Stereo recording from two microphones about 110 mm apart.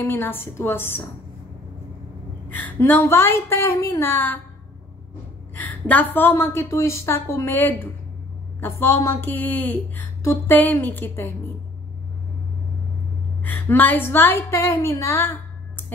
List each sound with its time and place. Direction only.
0.0 s a woman's voice: 20° left (ahead or behind)
2.5 s a woman's voice: 15° left (ahead or behind)
5.5 s a woman's voice: 15° left (ahead or behind)
13.4 s a woman's voice: 15° left (ahead or behind)